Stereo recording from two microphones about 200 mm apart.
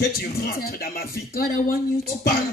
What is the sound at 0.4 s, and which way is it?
Speech, 50° left (ahead or behind).